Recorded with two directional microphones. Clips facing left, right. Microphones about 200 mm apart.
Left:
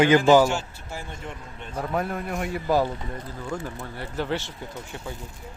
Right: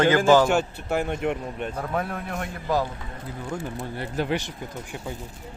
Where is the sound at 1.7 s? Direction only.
Centre (ahead or behind).